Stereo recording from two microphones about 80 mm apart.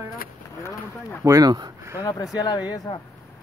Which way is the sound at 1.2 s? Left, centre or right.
Right.